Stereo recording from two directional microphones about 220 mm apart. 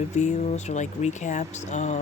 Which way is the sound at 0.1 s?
30° left (ahead or behind).